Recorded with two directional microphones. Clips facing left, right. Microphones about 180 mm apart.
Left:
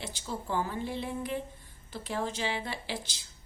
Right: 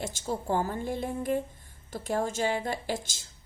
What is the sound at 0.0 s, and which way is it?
Speech, 45° right (ahead or behind).